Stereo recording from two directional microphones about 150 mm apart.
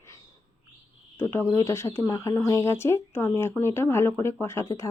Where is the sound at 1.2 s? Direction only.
15° left (ahead or behind).